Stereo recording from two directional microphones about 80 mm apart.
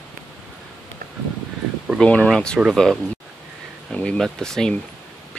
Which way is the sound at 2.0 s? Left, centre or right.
Centre.